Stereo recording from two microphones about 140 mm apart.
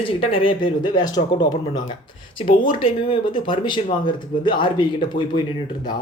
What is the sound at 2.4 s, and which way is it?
Speech, 75° left (ahead or behind).